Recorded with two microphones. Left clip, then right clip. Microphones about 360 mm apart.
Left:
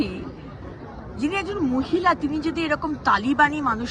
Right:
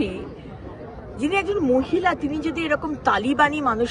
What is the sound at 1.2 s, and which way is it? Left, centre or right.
Speech, centre.